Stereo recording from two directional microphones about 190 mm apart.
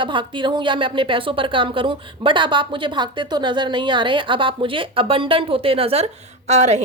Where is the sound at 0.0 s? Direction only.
25° right (ahead or behind).